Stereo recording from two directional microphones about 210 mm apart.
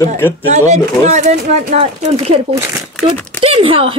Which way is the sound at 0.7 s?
35° right (ahead or behind).